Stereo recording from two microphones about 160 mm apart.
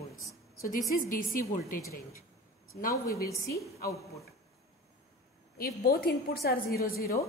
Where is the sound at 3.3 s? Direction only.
20° left (ahead or behind).